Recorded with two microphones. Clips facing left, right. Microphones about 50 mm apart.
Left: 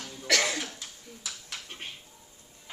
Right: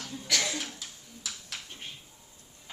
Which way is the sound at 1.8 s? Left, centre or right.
Left.